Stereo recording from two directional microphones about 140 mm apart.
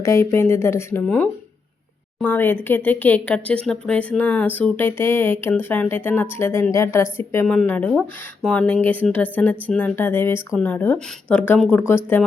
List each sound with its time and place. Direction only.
0.0 s speech: 20° left (ahead or behind)
7.4 s speech: 5° left (ahead or behind)